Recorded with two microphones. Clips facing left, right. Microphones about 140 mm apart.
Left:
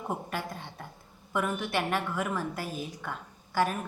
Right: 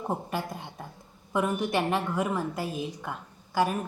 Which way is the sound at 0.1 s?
15° right (ahead or behind).